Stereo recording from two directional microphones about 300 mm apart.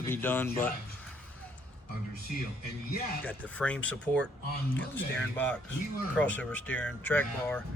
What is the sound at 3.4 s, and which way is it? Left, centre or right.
Speech, centre.